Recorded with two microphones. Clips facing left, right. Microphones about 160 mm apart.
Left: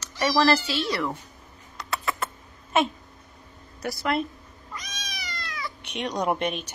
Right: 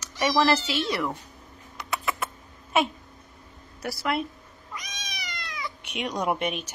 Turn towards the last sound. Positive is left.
turn(degrees=-5)  # may be behind; listen again after turning